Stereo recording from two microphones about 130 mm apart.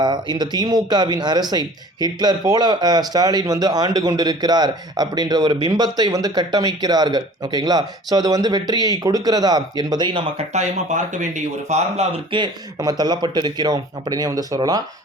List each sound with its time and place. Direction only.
0.0 s speech: 35° right (ahead or behind)
10.5 s speech: 65° right (ahead or behind)
12.3 s speech: 35° right (ahead or behind)